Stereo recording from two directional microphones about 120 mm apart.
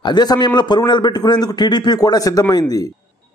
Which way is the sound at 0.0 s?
35° left (ahead or behind).